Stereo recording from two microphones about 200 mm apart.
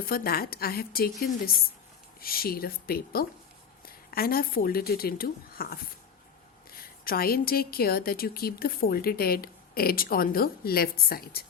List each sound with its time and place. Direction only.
0.0 s a woman's voice: 50° left (ahead or behind)